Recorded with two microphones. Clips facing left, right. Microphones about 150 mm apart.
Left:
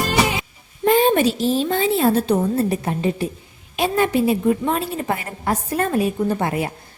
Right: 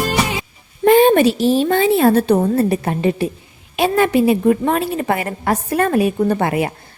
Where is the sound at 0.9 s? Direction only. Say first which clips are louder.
Right 5 dB; 70° right (ahead or behind).